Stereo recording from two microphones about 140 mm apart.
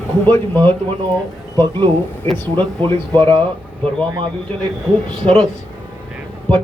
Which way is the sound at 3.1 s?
40° right (ahead or behind).